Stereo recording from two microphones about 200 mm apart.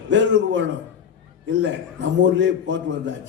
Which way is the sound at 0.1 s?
65° right (ahead or behind).